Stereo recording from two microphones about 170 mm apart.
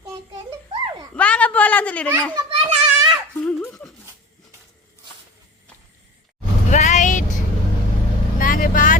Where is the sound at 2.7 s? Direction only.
35° right (ahead or behind).